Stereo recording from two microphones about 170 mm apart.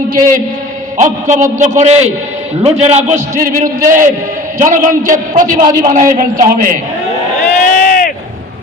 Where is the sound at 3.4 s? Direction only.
50° right (ahead or behind).